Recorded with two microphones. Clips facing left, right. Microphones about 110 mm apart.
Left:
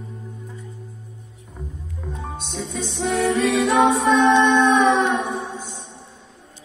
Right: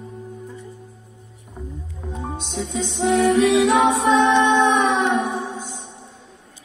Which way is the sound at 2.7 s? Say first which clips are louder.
Right 4 dB; 15° right (ahead or behind).